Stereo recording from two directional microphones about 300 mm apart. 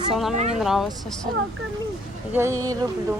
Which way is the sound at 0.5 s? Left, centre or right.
Centre.